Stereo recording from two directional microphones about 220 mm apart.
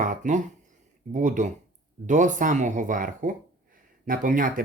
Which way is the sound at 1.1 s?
35° right (ahead or behind).